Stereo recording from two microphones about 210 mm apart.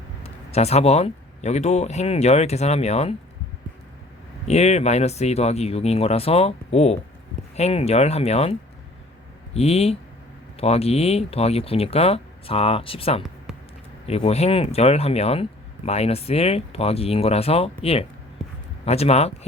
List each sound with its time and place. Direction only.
0.2 s speech: 30° left (ahead or behind)
4.4 s speech: 30° left (ahead or behind)
9.6 s speech: 30° left (ahead or behind)